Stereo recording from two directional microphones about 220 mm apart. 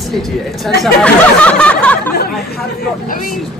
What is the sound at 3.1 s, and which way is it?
Speech, 40° left (ahead or behind).